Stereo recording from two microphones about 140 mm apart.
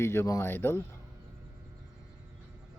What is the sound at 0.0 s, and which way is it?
Speech, 20° left (ahead or behind).